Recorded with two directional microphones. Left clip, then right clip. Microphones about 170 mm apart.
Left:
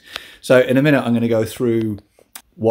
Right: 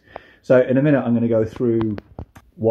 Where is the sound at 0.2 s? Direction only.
15° left (ahead or behind).